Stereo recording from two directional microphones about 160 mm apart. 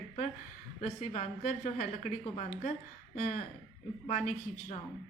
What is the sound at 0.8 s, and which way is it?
A woman's voice, 45° left (ahead or behind).